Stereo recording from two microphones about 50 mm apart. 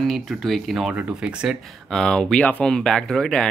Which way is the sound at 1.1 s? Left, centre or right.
Centre.